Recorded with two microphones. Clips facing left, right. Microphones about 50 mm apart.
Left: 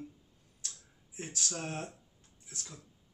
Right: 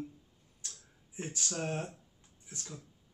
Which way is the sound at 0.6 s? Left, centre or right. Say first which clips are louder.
Left 2 dB; centre.